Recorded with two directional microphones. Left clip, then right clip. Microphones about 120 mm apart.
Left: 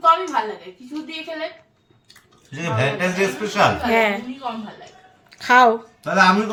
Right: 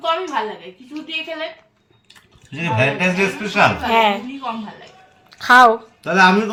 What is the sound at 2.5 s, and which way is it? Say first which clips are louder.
A woman's voice: right 4 dB; 20° left (ahead or behind).